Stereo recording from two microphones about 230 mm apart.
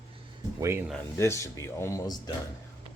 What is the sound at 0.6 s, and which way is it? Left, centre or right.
Speech, centre.